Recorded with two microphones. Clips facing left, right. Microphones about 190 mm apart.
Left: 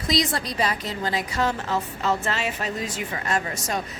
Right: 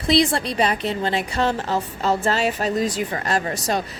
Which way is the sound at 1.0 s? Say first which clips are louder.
Right 1 dB; 30° right (ahead or behind).